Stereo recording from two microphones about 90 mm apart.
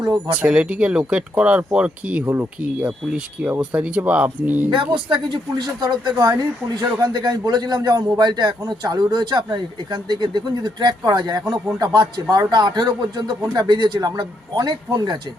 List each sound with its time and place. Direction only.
0.0 s speech: 55° right (ahead or behind)
0.3 s speech: 15° right (ahead or behind)
2.7 s speech: 10° right (ahead or behind)
4.7 s a man's voice: 65° right (ahead or behind)